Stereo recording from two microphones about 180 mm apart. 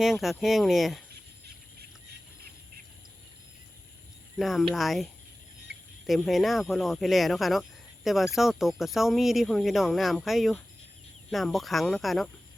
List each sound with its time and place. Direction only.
0.0 s speech: centre (ahead or behind)
4.4 s speech: centre (ahead or behind)
6.1 s speech: centre (ahead or behind)